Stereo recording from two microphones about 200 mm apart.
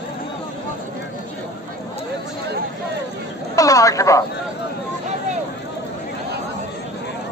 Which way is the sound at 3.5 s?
15° left (ahead or behind).